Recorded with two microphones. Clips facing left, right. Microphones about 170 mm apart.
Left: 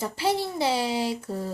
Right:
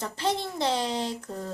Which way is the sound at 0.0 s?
5° left (ahead or behind).